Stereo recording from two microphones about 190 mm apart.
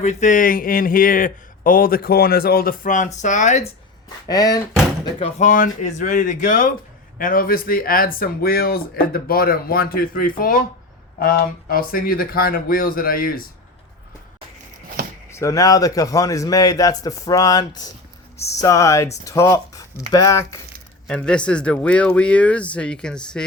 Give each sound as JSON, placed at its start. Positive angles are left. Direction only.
{"t": 0.0, "sound": "a man's voice", "side_deg": 40}
{"t": 4.3, "sound": "a man's voice", "side_deg": 20}
{"t": 5.2, "sound": "a man's voice", "side_deg": 40}
{"t": 15.3, "sound": "a man's voice", "side_deg": 15}
{"t": 21.1, "sound": "speech", "side_deg": 5}